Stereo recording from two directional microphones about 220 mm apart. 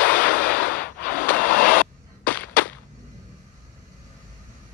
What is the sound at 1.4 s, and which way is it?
Vehicle, 40° left (ahead or behind).